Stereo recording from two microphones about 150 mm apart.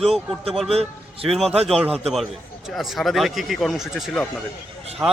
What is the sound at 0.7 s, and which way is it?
A man's voice, 40° right (ahead or behind).